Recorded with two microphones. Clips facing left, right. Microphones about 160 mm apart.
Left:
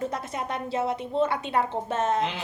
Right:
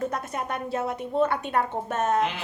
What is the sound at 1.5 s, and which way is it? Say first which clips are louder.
Speech: left 3 dB; 25° left (ahead or behind).